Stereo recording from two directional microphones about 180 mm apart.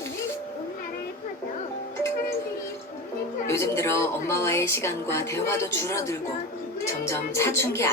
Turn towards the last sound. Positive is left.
turn(degrees=15)  # may be behind; listen again after turning